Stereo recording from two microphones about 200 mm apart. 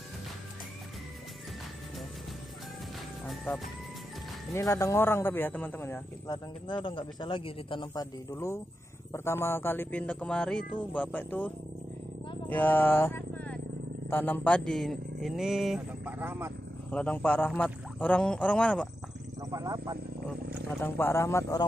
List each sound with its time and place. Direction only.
3.3 s speech: centre (ahead or behind)
4.6 s a man's voice: 15° left (ahead or behind); by 16.5 s 10° right (ahead or behind)
16.9 s speech: 5° left (ahead or behind)
19.5 s speech: 15° right (ahead or behind)
20.8 s a man's voice: 10° left (ahead or behind)